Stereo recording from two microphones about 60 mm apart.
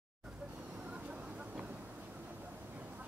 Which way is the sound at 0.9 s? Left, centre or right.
Centre.